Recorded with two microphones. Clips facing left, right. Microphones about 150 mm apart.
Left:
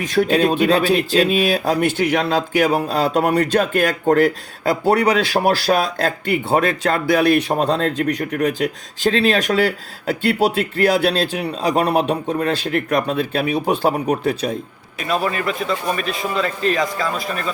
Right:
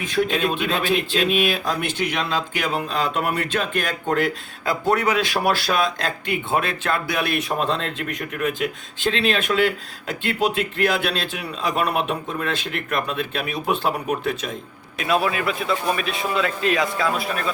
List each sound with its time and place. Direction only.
0.0 s speech: 40° left (ahead or behind)
14.9 s a man's voice: centre (ahead or behind)